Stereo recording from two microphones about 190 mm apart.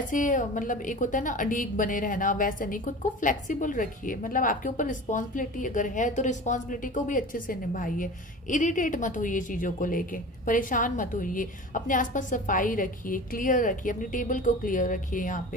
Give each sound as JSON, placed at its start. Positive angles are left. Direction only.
{"t": 0.1, "sound": "a woman's voice", "side_deg": 45}